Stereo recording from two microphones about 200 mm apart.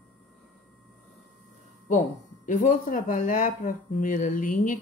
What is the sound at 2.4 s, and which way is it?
Speech, 40° left (ahead or behind).